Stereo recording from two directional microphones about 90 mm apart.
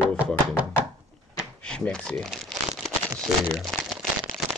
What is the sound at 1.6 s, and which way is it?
Crumpling, 10° left (ahead or behind).